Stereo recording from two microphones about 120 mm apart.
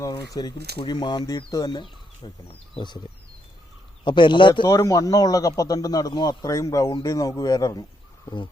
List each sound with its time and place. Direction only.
0.1 s speech: 35° left (ahead or behind)
1.8 s speech: 45° left (ahead or behind)
4.0 s speech: 40° left (ahead or behind)
4.7 s speech: 25° left (ahead or behind)